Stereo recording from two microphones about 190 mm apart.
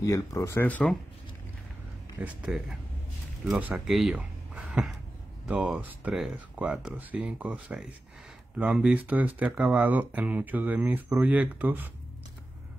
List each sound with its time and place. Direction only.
0.0 s speech: 15° left (ahead or behind)
2.1 s speech: 5° right (ahead or behind)